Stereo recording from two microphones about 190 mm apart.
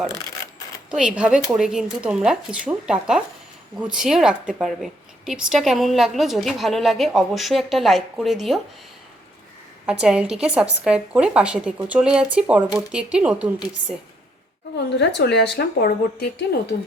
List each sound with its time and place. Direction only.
0.9 s a woman's voice: 5° right (ahead or behind)
9.8 s a woman's voice: 5° right (ahead or behind)
14.8 s a woman's voice: 65° left (ahead or behind)